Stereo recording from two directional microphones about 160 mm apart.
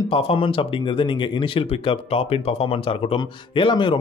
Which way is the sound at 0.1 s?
35° left (ahead or behind).